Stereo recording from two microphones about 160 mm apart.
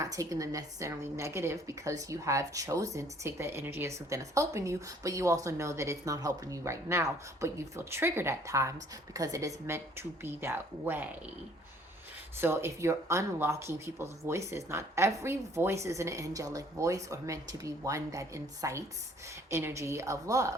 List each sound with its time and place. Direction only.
0.0 s a woman's voice: 20° right (ahead or behind)
12.4 s a woman's voice: 15° right (ahead or behind)